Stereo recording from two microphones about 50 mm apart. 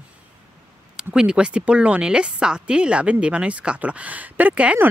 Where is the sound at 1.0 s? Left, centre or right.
Centre.